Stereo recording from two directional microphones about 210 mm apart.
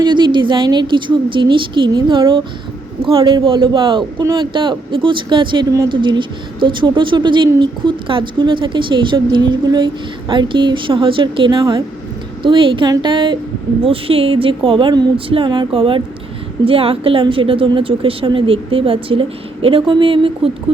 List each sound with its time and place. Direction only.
0.0 s speech: 20° right (ahead or behind)